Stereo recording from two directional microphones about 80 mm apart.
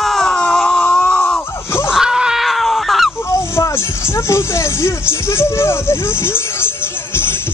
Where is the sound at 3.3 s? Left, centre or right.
Left.